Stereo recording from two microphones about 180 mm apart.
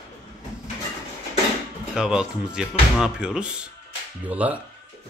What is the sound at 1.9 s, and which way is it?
Speech, 5° right (ahead or behind).